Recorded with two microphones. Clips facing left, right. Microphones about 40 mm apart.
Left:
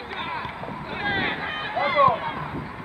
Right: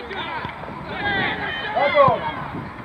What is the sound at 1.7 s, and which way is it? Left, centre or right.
Speech, right.